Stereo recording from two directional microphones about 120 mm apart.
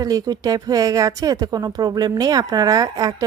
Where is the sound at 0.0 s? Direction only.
30° right (ahead or behind).